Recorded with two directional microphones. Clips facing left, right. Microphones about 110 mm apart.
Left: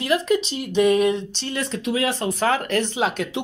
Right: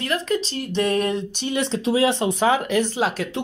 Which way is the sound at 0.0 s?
15° left (ahead or behind).